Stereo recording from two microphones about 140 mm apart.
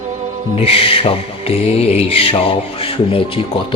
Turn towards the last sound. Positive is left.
turn(degrees=40)  # may be behind; listen again after turning